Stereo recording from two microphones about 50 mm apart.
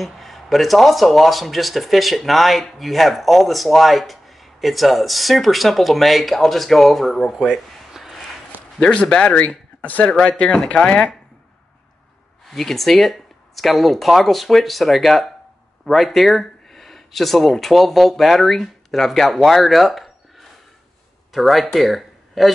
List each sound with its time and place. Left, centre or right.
0.0 s speech: centre
7.5 s a sound: centre
9.0 s speech: centre
12.4 s speech: centre